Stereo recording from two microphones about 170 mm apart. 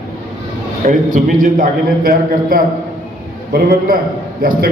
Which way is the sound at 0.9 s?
50° right (ahead or behind).